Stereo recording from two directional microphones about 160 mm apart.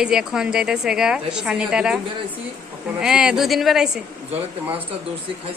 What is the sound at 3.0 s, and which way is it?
A woman's voice, 5° right (ahead or behind).